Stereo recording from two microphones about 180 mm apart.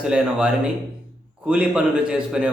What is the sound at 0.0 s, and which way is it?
A man's voice, 5° right (ahead or behind).